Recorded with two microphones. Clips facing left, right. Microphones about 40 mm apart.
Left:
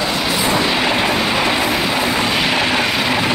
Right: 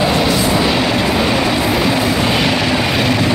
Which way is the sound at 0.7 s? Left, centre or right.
Centre.